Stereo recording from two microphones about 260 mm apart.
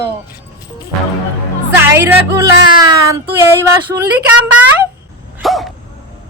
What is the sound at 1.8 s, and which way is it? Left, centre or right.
A woman's voice, centre.